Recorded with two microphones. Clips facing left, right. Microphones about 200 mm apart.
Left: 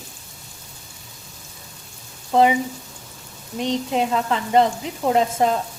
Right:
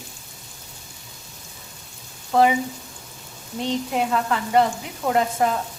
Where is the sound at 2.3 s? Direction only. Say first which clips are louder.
Left 1 dB; 20° left (ahead or behind).